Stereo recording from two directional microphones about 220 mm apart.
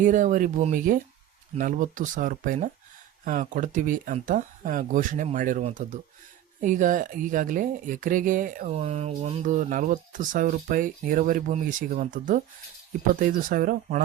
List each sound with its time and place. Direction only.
0.0 s speech: 35° right (ahead or behind)